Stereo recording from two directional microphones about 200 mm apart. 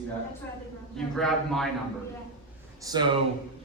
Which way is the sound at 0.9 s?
Centre (ahead or behind).